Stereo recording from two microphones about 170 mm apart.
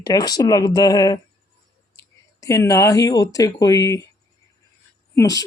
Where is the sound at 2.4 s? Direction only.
20° left (ahead or behind).